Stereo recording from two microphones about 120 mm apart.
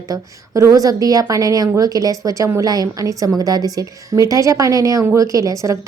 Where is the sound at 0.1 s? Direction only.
30° right (ahead or behind).